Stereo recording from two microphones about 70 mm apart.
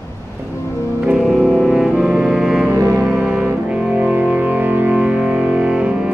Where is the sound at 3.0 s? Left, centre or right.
Centre.